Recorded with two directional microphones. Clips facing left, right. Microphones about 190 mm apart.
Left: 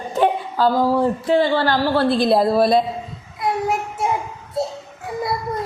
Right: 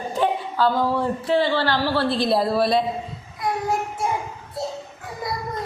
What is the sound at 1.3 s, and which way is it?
A woman's voice, 45° left (ahead or behind).